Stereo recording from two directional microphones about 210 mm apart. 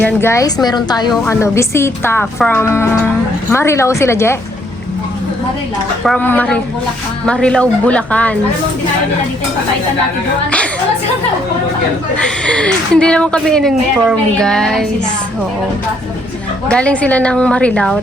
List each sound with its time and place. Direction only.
0.0 s speech: 10° left (ahead or behind)
6.1 s a woman's voice: 10° left (ahead or behind)
12.2 s a woman's voice: 5° left (ahead or behind)
16.6 s a woman's voice: 5° left (ahead or behind)